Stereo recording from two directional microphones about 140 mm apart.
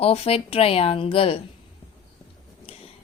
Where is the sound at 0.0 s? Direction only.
45° left (ahead or behind).